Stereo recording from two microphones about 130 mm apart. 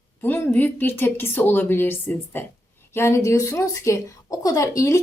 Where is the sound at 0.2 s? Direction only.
15° left (ahead or behind).